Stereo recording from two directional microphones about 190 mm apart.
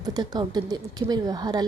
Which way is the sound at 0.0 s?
20° right (ahead or behind).